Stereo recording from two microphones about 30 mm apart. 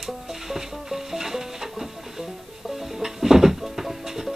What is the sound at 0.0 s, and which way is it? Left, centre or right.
Music, centre.